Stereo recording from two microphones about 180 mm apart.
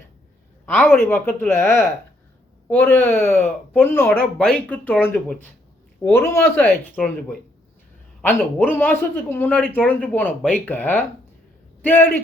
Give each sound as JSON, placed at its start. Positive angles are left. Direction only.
{"t": 0.6, "sound": "speech", "side_deg": 10}
{"t": 8.2, "sound": "speech", "side_deg": 10}